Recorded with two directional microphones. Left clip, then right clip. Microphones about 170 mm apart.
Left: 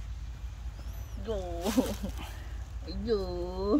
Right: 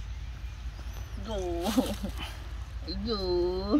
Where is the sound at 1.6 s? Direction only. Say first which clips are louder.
Left 1 dB; centre (ahead or behind).